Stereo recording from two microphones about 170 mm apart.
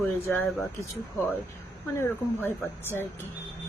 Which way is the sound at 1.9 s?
15° left (ahead or behind).